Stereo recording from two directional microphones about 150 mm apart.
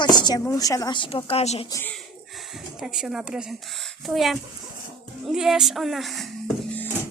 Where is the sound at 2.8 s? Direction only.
5° right (ahead or behind).